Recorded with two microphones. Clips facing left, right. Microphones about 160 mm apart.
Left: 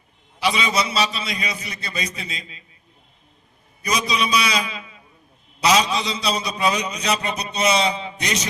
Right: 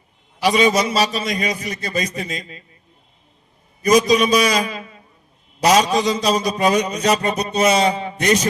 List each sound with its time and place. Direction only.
0.4 s a man's voice: 45° right (ahead or behind)
3.8 s a man's voice: 45° right (ahead or behind)